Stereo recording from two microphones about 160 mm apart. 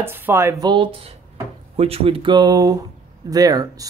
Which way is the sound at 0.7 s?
35° right (ahead or behind).